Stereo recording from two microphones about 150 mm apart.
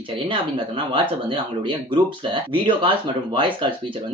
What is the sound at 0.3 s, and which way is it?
Speech, 35° right (ahead or behind).